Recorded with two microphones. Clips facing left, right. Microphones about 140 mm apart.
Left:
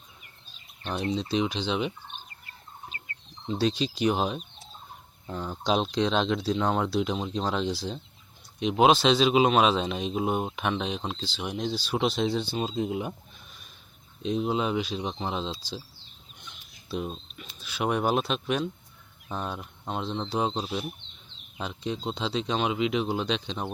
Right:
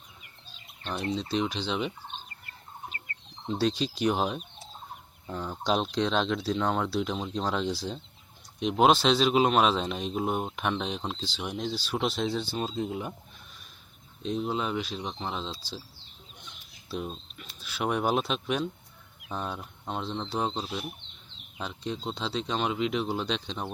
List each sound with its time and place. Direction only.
0.9 s speech: 15° left (ahead or behind)
3.5 s speech: 5° left (ahead or behind)
3.8 s speech: 90° left
4.1 s speech: 10° left (ahead or behind)
5.6 s speech: 15° left (ahead or behind)
6.0 s speech: centre (ahead or behind); by 7.3 s 15° left (ahead or behind)
7.3 s speech: 5° right (ahead or behind)
8.6 s speech: 10° left (ahead or behind)
12.5 s speech: 10° left (ahead or behind)
14.2 s speech: 10° left (ahead or behind)
16.9 s speech: 15° left (ahead or behind)
19.3 s speech: 10° left (ahead or behind)